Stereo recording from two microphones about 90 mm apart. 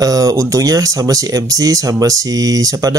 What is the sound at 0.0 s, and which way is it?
Speech, 40° right (ahead or behind).